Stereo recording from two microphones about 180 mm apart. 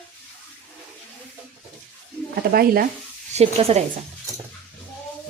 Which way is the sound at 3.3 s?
35° right (ahead or behind).